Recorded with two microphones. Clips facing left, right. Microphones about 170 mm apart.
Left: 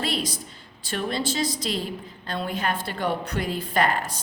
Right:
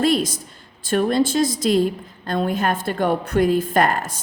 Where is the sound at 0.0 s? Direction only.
45° right (ahead or behind).